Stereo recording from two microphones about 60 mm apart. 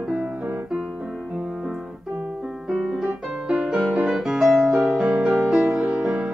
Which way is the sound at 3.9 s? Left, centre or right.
Centre.